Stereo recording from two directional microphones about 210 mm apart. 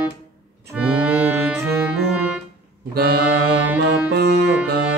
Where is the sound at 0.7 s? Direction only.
5° right (ahead or behind).